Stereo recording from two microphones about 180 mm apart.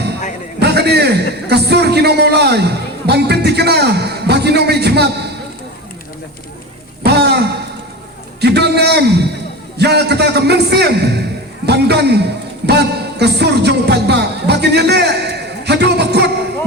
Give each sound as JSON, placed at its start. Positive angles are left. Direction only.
{"t": 0.6, "sound": "a man's voice", "side_deg": -65}
{"t": 7.0, "sound": "a sound", "side_deg": -65}
{"t": 9.7, "sound": "a man's voice", "side_deg": -65}